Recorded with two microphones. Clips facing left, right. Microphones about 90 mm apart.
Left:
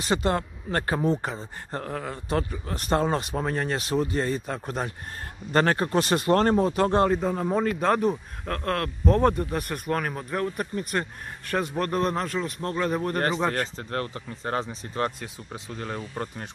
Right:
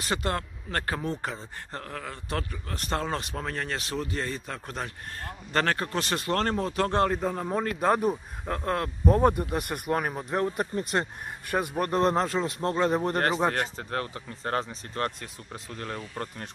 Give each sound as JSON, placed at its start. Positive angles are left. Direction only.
{"t": 0.1, "sound": "speech", "side_deg": 20}
{"t": 7.9, "sound": "speech", "side_deg": -10}
{"t": 11.4, "sound": "speech", "side_deg": -10}
{"t": 11.9, "sound": "a man's voice", "side_deg": -30}
{"t": 13.6, "sound": "speech", "side_deg": -5}